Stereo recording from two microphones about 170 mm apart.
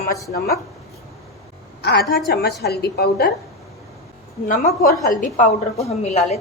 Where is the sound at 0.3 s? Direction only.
65° left (ahead or behind).